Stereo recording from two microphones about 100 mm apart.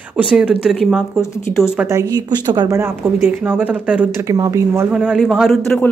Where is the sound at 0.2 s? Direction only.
10° right (ahead or behind).